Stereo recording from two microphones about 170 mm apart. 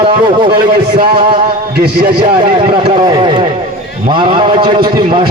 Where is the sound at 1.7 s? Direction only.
65° right (ahead or behind).